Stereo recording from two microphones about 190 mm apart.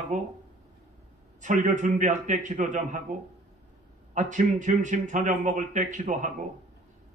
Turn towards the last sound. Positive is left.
turn(degrees=-40)  # may be behind; listen again after turning